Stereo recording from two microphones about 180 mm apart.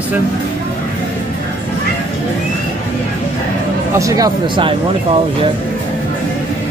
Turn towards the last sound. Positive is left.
turn(degrees=-25)  # may be behind; listen again after turning